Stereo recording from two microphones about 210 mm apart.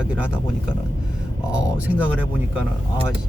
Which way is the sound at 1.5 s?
5° right (ahead or behind).